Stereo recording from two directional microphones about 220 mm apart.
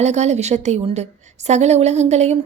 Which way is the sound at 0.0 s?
30° right (ahead or behind).